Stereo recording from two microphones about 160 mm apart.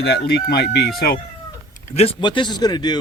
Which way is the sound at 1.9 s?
40° left (ahead or behind).